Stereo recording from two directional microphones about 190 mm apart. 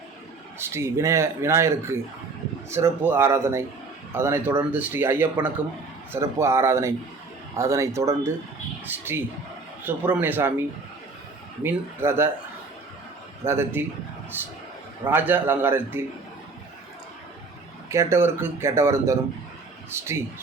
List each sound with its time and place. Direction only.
0.6 s speech: 15° right (ahead or behind)
11.6 s speech: 10° right (ahead or behind)
13.4 s speech: 15° right (ahead or behind)
17.8 s speech: 15° right (ahead or behind)